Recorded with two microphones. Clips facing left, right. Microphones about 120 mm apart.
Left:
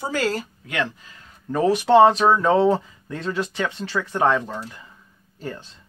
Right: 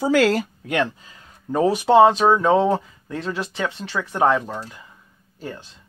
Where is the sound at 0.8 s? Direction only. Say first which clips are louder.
Right 3 dB; 20° right (ahead or behind).